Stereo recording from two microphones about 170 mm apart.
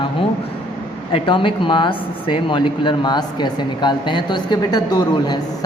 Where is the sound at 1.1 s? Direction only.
30° left (ahead or behind).